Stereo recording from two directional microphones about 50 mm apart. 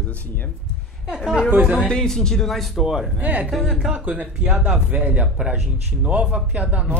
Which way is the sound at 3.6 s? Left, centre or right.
Centre.